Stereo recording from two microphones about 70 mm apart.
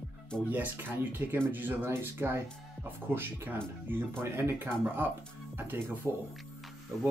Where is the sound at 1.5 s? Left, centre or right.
Right.